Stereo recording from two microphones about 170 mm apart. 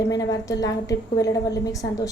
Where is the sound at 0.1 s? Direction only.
20° left (ahead or behind).